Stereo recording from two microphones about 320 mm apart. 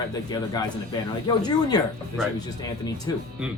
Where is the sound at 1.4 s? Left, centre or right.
Centre.